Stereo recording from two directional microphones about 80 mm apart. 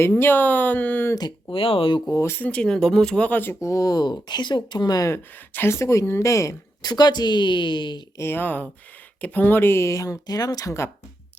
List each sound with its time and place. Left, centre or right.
0.0 s speech: left
2.0 s a woman's voice: left
2.4 s speech: centre
3.6 s speech: left
5.0 s a woman's voice: left
6.8 s speech: left
8.2 s a woman's voice: left